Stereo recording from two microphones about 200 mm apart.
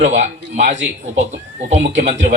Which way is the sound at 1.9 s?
35° right (ahead or behind).